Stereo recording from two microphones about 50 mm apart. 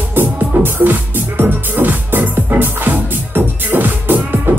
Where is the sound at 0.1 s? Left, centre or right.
Right.